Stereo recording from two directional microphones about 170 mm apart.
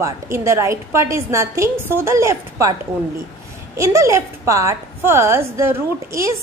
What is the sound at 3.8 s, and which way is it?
A woman's voice, 20° right (ahead or behind).